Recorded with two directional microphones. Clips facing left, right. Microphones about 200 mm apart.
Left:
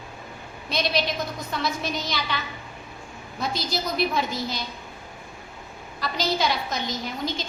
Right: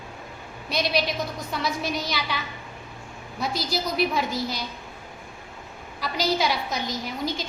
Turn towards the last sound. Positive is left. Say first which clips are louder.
# even
turn(degrees=-10)  # may be behind; listen again after turning